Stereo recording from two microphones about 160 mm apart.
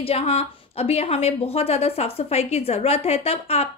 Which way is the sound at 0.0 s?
40° left (ahead or behind).